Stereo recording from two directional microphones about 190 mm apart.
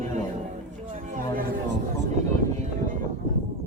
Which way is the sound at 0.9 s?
45° right (ahead or behind).